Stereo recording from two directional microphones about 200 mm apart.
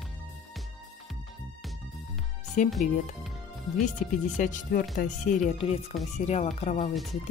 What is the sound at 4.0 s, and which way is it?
Speech, 40° left (ahead or behind).